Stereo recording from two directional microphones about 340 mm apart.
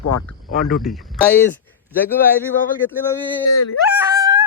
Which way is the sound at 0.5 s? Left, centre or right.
Centre.